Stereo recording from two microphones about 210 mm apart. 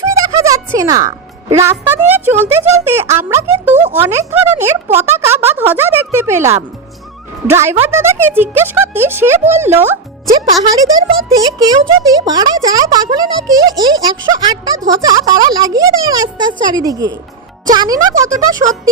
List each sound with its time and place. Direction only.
0.0 s a woman's voice: 15° right (ahead or behind)